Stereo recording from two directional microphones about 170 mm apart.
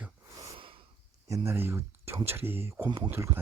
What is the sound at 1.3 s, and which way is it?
Speech, 15° right (ahead or behind).